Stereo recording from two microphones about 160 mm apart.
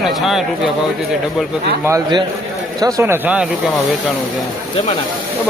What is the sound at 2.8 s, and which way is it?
Speech, 15° right (ahead or behind).